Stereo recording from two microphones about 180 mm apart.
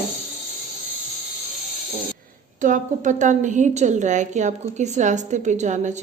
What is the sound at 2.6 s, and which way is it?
A woman's voice, 45° right (ahead or behind).